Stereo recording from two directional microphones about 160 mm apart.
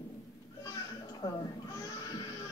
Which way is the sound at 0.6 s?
20° left (ahead or behind).